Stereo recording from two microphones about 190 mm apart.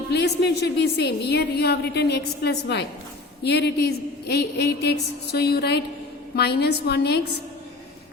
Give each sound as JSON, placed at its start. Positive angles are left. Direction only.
{"t": 0.1, "sound": "a woman's voice", "side_deg": 60}